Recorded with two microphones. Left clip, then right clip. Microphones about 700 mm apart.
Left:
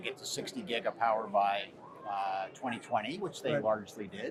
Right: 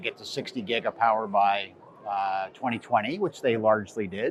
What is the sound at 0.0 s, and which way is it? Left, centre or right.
Speech, right.